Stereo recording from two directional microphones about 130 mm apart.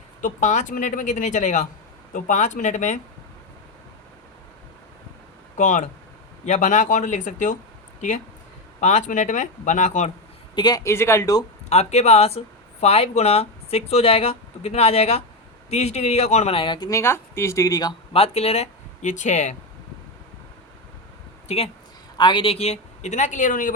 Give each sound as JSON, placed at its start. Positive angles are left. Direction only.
{"t": 0.2, "sound": "speech", "side_deg": 75}
{"t": 5.5, "sound": "speech", "side_deg": 70}
{"t": 8.8, "sound": "speech", "side_deg": 65}
{"t": 10.5, "sound": "speech", "side_deg": 30}
{"t": 11.7, "sound": "speech", "side_deg": 60}
{"t": 16.9, "sound": "speech", "side_deg": 20}
{"t": 18.1, "sound": "speech", "side_deg": 50}
{"t": 21.4, "sound": "speech", "side_deg": 50}
{"t": 22.2, "sound": "speech", "side_deg": 40}